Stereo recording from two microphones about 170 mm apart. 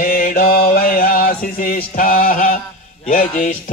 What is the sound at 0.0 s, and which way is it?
Mantra, 55° left (ahead or behind).